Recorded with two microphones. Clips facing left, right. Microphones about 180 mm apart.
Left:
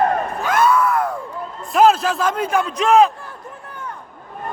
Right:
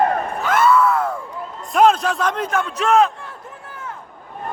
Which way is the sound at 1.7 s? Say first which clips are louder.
Left 1 dB; 5° left (ahead or behind).